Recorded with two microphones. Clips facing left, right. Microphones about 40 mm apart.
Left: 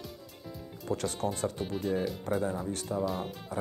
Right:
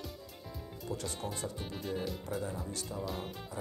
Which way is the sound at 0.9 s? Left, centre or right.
Left.